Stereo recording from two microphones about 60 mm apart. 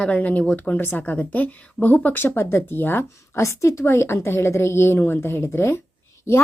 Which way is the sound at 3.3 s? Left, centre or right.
Left.